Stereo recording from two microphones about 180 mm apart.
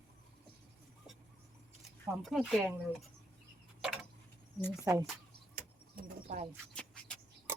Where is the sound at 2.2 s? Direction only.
Centre (ahead or behind).